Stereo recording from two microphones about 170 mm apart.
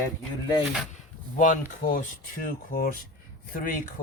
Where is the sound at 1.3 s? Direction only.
50° left (ahead or behind).